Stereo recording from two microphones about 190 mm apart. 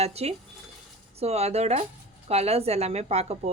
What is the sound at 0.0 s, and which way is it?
A woman's voice, 35° right (ahead or behind).